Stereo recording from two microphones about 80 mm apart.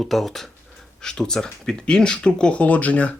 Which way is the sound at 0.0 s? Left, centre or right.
Centre.